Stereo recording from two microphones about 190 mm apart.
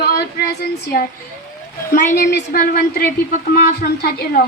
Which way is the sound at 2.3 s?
55° left (ahead or behind).